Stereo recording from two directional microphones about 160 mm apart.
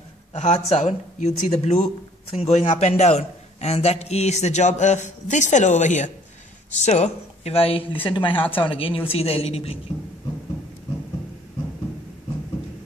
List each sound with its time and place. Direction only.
0.3 s a man's voice: 45° left (ahead or behind)
8.4 s speech: 10° left (ahead or behind)
8.6 s speech: 35° left (ahead or behind)